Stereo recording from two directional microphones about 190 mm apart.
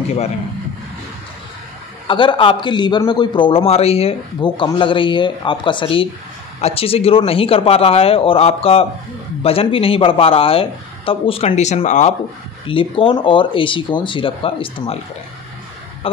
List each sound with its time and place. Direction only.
2.0 s a man's voice: 25° left (ahead or behind)
12.6 s a man's voice: 25° left (ahead or behind)